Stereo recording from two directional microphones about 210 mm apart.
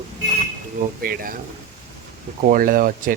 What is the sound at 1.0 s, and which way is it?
Speech, 45° right (ahead or behind).